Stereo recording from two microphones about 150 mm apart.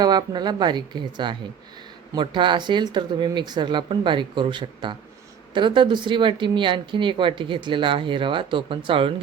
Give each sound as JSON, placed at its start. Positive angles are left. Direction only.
{"t": 0.0, "sound": "a woman's voice", "side_deg": -30}